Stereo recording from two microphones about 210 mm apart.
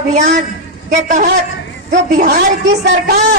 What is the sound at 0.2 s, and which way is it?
A man's voice, 35° right (ahead or behind).